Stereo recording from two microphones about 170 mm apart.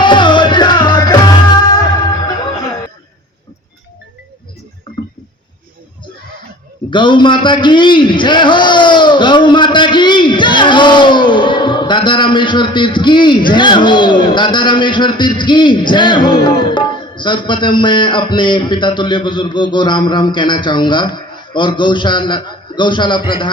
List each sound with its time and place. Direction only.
0.0 s music: 25° left (ahead or behind)
6.9 s a man's voice: 25° left (ahead or behind)